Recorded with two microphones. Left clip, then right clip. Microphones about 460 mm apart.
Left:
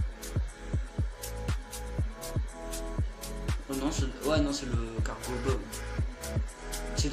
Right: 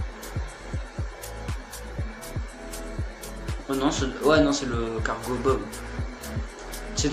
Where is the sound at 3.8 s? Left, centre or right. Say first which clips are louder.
Right 10 dB; right.